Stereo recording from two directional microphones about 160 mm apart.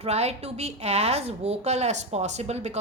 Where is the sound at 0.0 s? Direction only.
40° right (ahead or behind).